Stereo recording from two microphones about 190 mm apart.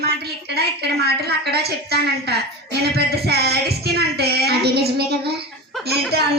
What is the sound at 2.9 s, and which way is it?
Child singing, 55° right (ahead or behind).